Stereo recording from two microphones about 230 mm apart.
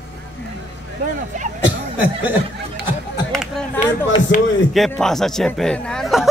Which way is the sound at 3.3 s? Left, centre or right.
Centre.